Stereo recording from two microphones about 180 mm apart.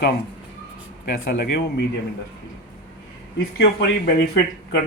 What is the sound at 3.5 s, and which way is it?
Speech, 60° left (ahead or behind).